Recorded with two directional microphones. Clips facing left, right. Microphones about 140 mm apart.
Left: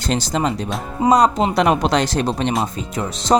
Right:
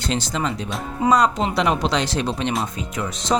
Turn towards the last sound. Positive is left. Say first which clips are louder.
# left 5 dB
turn(degrees=50)  # may be behind; listen again after turning